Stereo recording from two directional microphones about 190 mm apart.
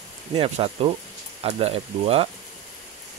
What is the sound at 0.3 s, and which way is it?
Speech, 30° right (ahead or behind).